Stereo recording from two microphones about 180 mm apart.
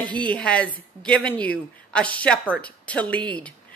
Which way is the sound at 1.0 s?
5° left (ahead or behind).